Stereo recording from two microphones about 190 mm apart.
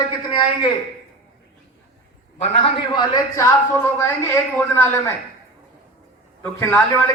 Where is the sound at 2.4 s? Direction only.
30° left (ahead or behind); by 5.1 s 10° left (ahead or behind).